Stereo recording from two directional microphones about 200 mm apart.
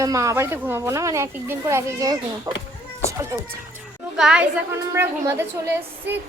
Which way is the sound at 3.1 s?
15° right (ahead or behind).